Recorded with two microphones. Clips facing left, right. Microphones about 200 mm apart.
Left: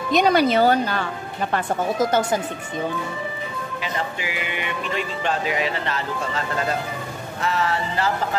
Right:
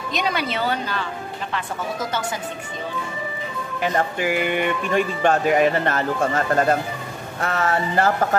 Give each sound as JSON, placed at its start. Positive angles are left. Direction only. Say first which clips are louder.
{"t": 0.1, "sound": "a woman's voice", "louder": "left 8 dB", "side_deg": 40}
{"t": 3.8, "sound": "speech", "louder": "right 8 dB", "side_deg": -50}